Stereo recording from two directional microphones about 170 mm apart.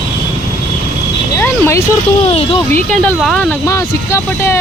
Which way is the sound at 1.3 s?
15° left (ahead or behind).